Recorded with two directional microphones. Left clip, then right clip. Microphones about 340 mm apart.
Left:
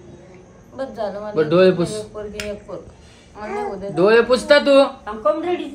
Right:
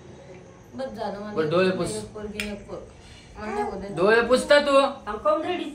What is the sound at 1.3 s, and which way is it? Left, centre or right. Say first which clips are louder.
Speech: left 8 dB; left.